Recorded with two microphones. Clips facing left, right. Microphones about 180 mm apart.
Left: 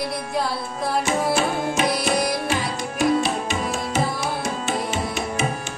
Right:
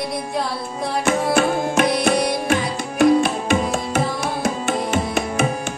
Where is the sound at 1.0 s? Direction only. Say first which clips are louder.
Right 6 dB; 55° right (ahead or behind).